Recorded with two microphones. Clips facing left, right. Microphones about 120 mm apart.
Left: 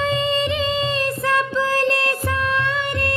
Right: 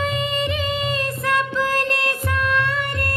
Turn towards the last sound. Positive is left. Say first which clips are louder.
# left 1 dB
turn(degrees=25)  # may be behind; listen again after turning